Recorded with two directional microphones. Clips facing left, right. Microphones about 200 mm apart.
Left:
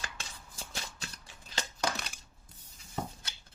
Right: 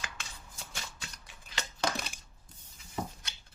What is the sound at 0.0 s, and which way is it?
Shuffling cards, 35° left (ahead or behind).